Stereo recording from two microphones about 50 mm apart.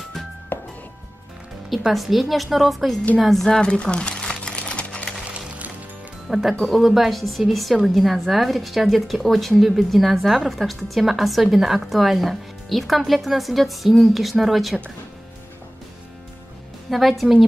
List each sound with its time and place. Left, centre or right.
0.5 s music: left
1.9 s a woman's voice: centre
3.6 s sewing machine: centre
6.2 s a woman's voice: centre
17.2 s a woman's voice: centre